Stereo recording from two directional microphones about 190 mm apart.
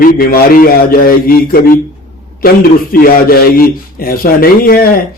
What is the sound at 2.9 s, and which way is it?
A man's voice, 50° left (ahead or behind).